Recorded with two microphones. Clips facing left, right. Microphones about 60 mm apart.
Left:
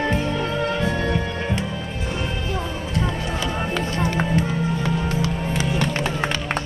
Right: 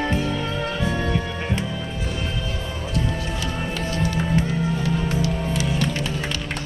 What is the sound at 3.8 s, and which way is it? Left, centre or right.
Music, left.